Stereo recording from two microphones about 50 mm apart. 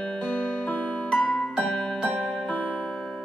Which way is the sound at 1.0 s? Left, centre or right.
Centre.